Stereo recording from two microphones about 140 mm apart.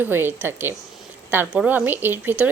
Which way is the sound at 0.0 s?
15° right (ahead or behind).